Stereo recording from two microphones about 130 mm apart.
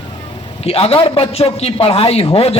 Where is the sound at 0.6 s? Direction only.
50° left (ahead or behind).